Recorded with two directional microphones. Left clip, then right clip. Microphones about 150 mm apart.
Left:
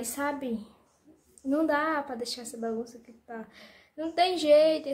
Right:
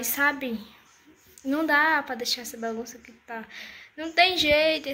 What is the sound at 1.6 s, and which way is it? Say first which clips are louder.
Speech: right 6 dB; 15° left (ahead or behind).